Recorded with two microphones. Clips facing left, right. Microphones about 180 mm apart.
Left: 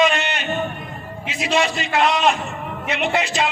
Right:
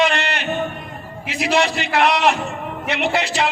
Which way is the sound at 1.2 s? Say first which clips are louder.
Right 2 dB; 65° right (ahead or behind).